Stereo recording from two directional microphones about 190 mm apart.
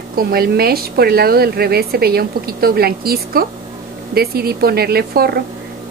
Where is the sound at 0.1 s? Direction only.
55° right (ahead or behind).